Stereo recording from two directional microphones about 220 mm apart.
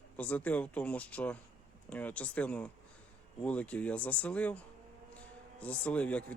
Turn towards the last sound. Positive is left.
turn(degrees=5)  # may be behind; listen again after turning